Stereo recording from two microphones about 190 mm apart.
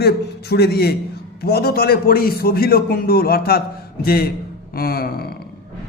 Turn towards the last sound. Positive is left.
turn(degrees=55)  # may be behind; listen again after turning